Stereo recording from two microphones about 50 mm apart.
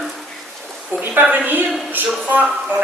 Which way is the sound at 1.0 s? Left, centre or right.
Right.